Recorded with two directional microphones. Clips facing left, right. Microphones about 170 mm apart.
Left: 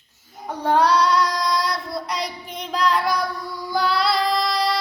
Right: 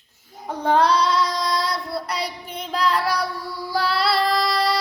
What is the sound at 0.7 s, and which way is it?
Female singing, centre (ahead or behind).